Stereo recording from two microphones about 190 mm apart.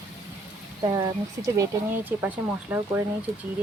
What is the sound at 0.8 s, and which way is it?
Speech, 20° right (ahead or behind).